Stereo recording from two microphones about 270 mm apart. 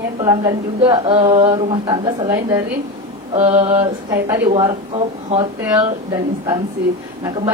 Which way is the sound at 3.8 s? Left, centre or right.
Centre.